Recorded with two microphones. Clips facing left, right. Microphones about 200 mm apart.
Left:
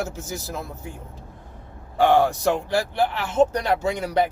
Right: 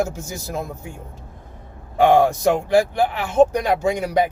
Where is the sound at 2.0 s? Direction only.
15° right (ahead or behind).